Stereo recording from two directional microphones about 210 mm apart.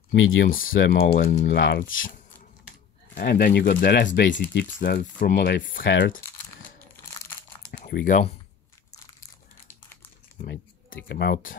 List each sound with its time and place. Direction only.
0.5 s speech: 40° left (ahead or behind)
1.6 s speech: 60° left (ahead or behind)
3.2 s speech: 45° left (ahead or behind)
4.3 s speech: 40° left (ahead or behind)
5.9 s speech: 60° left (ahead or behind)
7.8 s speech: 40° left (ahead or behind)
10.4 s a sound: 50° left (ahead or behind)
11.1 s speech: 55° left (ahead or behind)